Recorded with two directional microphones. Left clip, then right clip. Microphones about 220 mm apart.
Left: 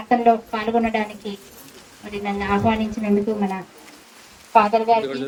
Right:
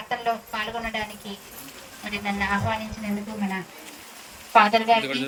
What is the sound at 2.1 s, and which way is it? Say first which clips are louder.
A woman's voice: left 3 dB; 45° left (ahead or behind).